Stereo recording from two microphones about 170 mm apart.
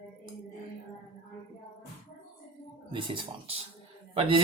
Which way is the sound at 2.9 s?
30° right (ahead or behind).